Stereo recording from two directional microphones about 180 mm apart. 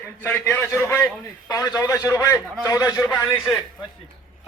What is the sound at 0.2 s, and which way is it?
A man's voice, 10° left (ahead or behind).